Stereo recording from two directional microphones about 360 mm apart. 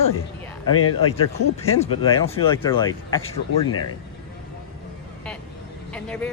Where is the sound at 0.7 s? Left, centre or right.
Left.